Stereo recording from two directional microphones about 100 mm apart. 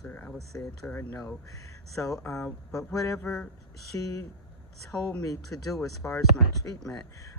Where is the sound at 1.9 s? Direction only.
30° left (ahead or behind).